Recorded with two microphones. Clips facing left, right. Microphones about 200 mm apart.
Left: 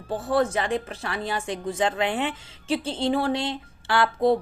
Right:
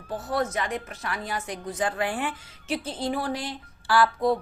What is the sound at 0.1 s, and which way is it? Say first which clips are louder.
A woman's voice: left 5 dB; 30° left (ahead or behind).